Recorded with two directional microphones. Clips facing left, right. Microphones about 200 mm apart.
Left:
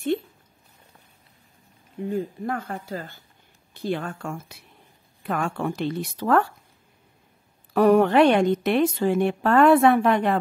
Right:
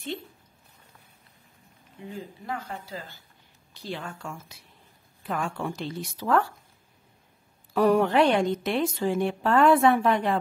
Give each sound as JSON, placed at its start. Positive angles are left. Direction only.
{"t": 2.0, "sound": "a woman's voice", "side_deg": 55}
{"t": 7.7, "sound": "a woman's voice", "side_deg": 60}